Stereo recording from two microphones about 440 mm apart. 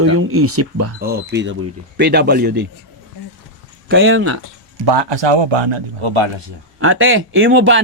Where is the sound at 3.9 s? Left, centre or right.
Right.